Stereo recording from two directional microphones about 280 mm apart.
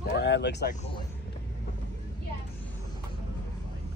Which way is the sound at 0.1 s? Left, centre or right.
Left.